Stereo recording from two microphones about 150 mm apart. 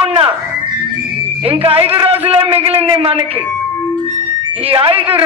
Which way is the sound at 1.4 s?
40° right (ahead or behind).